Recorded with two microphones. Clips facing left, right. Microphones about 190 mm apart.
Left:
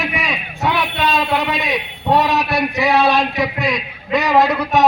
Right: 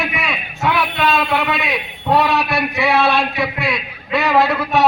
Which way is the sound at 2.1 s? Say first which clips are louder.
Even; 20° left (ahead or behind).